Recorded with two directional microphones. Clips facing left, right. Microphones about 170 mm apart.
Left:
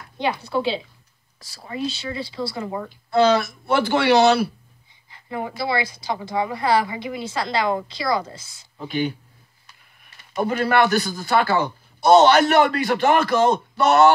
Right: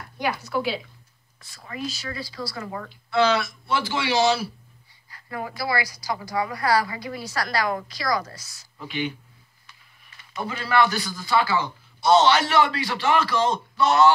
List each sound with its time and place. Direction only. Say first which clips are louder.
0.2 s a woman's voice: left 3 dB; 30° left (ahead or behind)
3.1 s a man's voice: left 4 dB; 35° left (ahead or behind); by 4.5 s 60° left (ahead or behind)
5.1 s a woman's voice: left 4 dB; 25° left (ahead or behind)
8.8 s speech: left 5 dB; 40° left (ahead or behind)
10.3 s a man's voice: left 4 dB; 50° left (ahead or behind)